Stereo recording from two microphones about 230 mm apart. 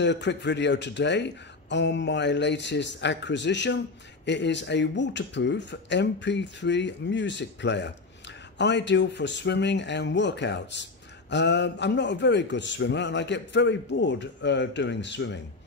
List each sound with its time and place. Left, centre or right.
0.0 s a man's voice: left